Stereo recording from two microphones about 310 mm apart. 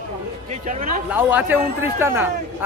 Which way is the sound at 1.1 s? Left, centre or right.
Centre.